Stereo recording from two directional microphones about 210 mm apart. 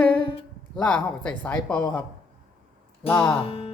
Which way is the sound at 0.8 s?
5° left (ahead or behind).